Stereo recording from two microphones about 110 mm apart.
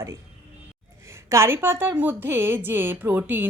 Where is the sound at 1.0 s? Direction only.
25° right (ahead or behind).